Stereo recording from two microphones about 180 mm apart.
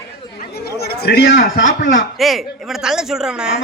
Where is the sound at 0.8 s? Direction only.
60° left (ahead or behind); by 1.7 s 90° left.